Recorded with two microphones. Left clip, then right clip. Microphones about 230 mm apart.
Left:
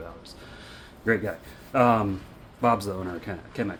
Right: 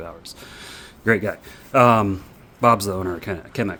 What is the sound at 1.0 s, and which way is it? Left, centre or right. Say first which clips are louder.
Speech: right 6 dB; right.